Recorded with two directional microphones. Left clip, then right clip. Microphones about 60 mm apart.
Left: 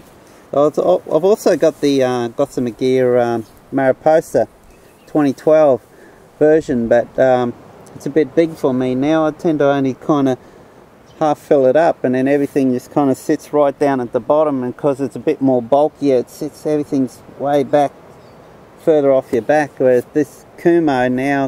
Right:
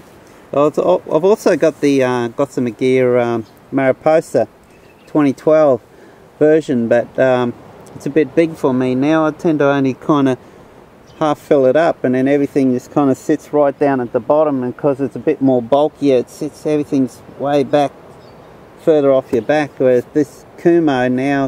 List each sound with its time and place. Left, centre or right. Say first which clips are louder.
0.5 s speech: even; centre
13.6 s speech: even; left
15.2 s speech: right 1 dB; centre